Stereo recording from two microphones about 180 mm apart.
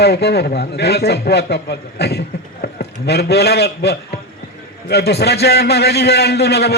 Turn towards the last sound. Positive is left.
turn(degrees=65)  # may be behind; listen again after turning